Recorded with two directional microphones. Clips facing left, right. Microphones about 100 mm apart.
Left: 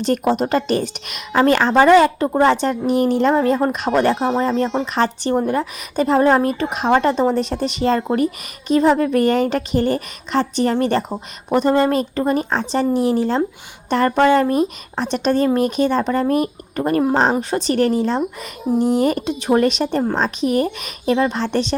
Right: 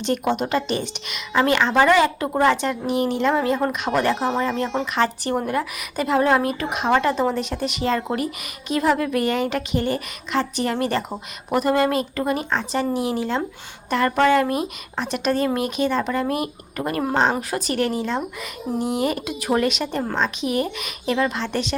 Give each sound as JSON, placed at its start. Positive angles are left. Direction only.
{"t": 0.0, "sound": "a woman's voice", "side_deg": 40}